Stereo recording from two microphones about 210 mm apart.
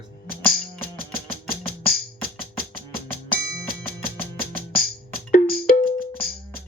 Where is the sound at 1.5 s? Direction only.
45° left (ahead or behind).